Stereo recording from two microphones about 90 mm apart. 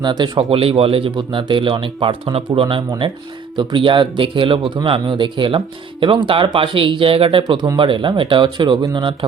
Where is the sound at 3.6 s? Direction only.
65° right (ahead or behind); by 7.4 s 85° right.